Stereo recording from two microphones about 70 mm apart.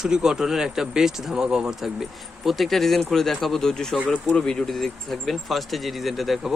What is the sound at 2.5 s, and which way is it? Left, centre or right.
Speech, centre.